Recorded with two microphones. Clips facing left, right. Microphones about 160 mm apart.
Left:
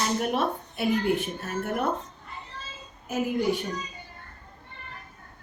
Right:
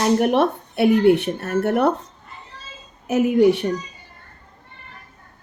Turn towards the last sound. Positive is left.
turn(degrees=-75)  # may be behind; listen again after turning